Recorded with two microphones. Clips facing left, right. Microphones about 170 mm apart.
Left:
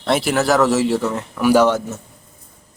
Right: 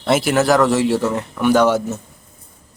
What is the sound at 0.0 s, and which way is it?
Speech, centre (ahead or behind).